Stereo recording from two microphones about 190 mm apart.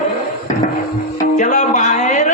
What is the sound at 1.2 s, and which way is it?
Music, 40° left (ahead or behind).